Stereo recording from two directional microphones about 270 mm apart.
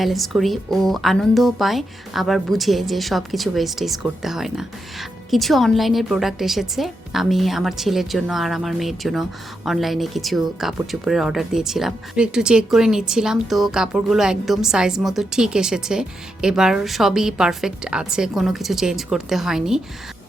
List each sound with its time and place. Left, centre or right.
0.0 s speech: centre